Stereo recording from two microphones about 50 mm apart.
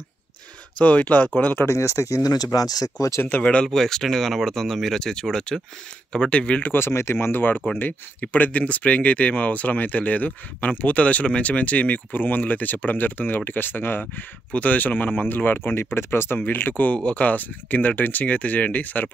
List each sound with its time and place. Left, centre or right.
0.7 s speech: left
1.7 s speech: left
3.2 s speech: left
3.6 s speech: centre
6.7 s speech: left
16.3 s speech: left
16.9 s speech: left